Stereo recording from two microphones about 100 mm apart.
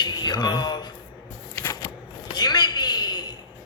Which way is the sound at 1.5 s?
35° left (ahead or behind).